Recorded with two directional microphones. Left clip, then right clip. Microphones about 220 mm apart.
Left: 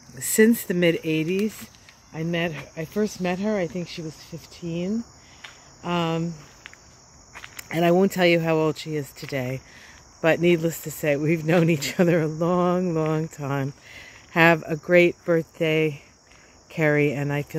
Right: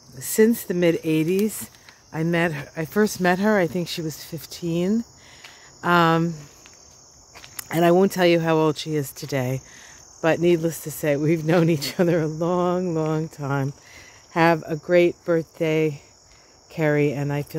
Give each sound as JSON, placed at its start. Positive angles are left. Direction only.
{"t": 0.2, "sound": "speech", "side_deg": -5}
{"t": 7.3, "sound": "speech", "side_deg": -10}
{"t": 10.2, "sound": "speech", "side_deg": -5}